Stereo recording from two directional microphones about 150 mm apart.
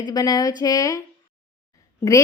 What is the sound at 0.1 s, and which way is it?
A woman's voice, 25° left (ahead or behind).